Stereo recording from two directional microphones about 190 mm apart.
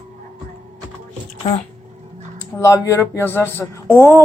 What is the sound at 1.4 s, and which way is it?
Speech, 30° left (ahead or behind).